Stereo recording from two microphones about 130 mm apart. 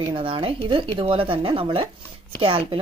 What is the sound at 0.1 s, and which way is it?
Speech, 40° right (ahead or behind).